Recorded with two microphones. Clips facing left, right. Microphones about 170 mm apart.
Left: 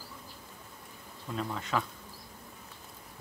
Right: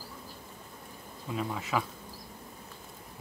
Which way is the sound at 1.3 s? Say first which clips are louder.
Right 1 dB; 5° right (ahead or behind).